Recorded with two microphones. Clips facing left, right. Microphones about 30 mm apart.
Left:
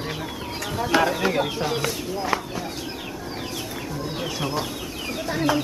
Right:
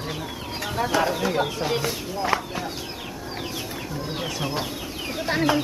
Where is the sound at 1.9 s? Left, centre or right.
Centre.